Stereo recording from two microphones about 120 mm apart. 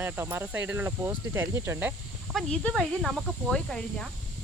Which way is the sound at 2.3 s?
5° left (ahead or behind).